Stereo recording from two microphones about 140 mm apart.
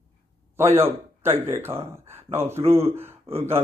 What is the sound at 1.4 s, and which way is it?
Speech, 15° right (ahead or behind).